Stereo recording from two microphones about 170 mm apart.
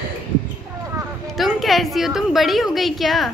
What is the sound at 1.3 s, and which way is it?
A woman's voice, centre (ahead or behind).